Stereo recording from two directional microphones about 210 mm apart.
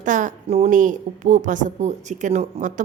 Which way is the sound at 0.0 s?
35° right (ahead or behind).